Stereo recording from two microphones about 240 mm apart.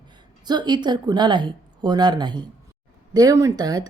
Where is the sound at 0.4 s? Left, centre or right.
Centre.